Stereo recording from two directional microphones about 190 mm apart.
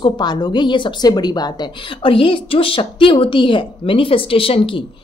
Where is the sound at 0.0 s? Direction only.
20° left (ahead or behind).